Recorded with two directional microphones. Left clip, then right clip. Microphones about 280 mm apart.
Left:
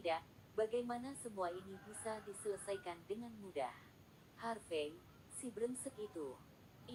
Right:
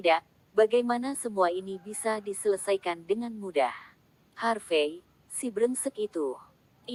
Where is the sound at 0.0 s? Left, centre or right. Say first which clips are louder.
Right 16 dB; right.